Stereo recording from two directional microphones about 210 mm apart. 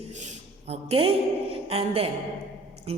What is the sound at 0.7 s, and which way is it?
A woman's voice, 30° right (ahead or behind).